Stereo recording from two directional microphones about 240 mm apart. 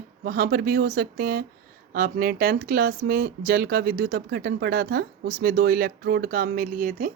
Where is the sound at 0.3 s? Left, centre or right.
Right.